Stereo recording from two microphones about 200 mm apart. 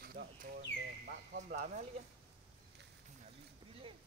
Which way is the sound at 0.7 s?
65° left (ahead or behind).